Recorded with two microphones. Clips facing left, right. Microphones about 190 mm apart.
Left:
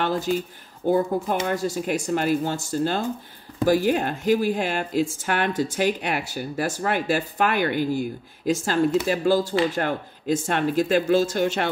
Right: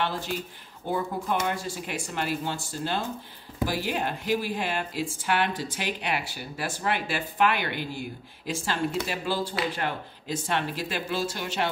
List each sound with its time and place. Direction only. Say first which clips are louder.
0.0 s speech: left 6 dB; 45° left (ahead or behind)